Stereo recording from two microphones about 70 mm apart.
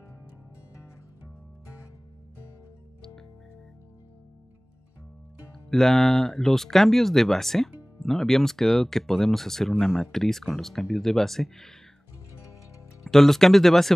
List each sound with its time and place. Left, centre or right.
5.7 s speech: centre
13.0 s speech: centre